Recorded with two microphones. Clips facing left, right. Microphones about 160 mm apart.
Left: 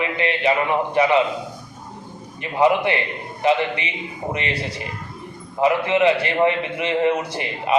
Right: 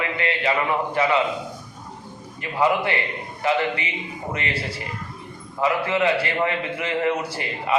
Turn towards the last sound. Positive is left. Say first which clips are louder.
# left 3 dB
turn(degrees=20)  # may be behind; listen again after turning